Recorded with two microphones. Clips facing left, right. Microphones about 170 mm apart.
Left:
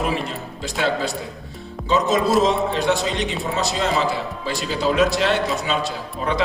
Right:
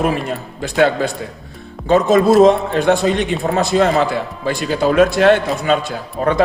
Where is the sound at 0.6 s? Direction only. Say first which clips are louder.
Right 7 dB; 55° right (ahead or behind).